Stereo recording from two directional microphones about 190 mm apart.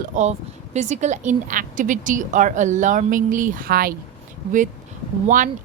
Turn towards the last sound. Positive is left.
turn(degrees=-45)  # may be behind; listen again after turning